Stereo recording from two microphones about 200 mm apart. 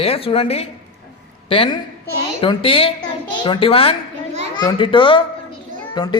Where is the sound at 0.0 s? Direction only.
30° left (ahead or behind).